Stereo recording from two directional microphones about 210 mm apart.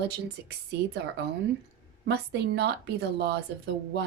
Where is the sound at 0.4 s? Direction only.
50° right (ahead or behind).